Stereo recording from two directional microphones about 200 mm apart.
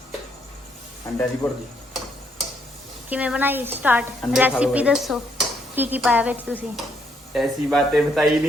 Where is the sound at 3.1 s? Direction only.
5° right (ahead or behind).